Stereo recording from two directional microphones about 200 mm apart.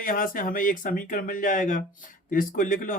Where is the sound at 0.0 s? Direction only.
45° left (ahead or behind).